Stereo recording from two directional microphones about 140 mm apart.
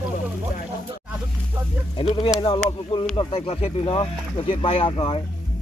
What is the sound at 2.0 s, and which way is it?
Speech, 40° left (ahead or behind).